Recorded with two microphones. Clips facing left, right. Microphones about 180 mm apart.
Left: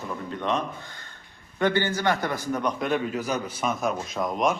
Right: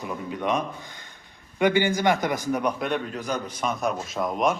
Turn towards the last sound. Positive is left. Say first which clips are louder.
# right 1 dB
turn(degrees=0)  # may be behind; listen again after turning